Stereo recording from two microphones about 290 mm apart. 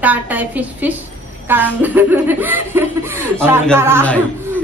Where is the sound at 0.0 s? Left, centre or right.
Centre.